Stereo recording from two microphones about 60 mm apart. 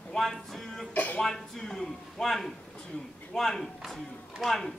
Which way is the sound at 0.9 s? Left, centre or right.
Left.